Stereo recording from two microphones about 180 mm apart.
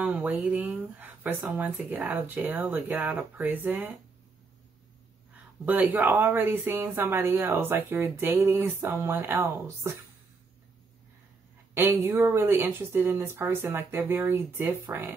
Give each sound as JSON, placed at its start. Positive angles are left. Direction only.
{"t": 0.0, "sound": "speech", "side_deg": -10}
{"t": 5.7, "sound": "speech", "side_deg": -10}
{"t": 11.7, "sound": "speech", "side_deg": -10}